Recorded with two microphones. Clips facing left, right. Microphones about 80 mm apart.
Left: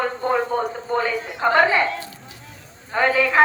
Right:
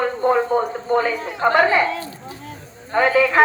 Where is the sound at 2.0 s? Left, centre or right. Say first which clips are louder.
Right 6 dB; right.